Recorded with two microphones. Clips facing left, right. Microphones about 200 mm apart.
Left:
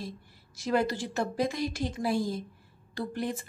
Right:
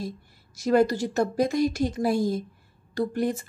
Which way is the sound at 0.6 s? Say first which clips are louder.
Right 7 dB; 45° right (ahead or behind).